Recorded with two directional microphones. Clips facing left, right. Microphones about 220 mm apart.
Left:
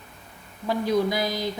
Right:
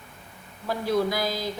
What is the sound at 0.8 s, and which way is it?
Speech, 20° left (ahead or behind).